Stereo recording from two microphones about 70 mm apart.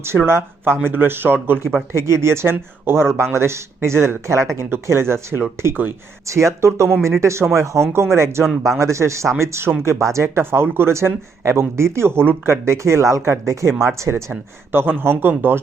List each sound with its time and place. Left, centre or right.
0.3 s speech: right
6.2 s speech: right
14.7 s speech: right